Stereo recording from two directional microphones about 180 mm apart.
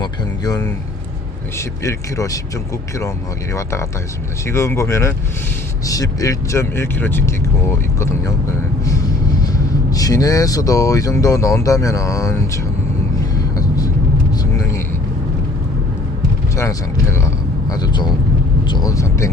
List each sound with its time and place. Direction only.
0.0 s speech: 20° left (ahead or behind)
3.5 s speech: 15° left (ahead or behind)
13.3 s vehicle: 20° left (ahead or behind)
16.6 s speech: 15° left (ahead or behind)